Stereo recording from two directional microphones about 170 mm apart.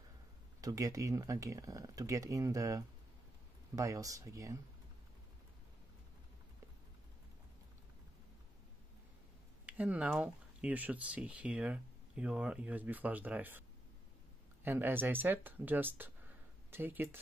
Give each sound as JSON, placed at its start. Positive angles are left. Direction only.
{"t": 0.6, "sound": "speech", "side_deg": -20}
{"t": 9.7, "sound": "speech", "side_deg": -10}